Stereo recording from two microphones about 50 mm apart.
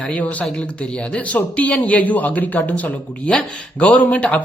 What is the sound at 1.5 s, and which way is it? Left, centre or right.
Speech, left.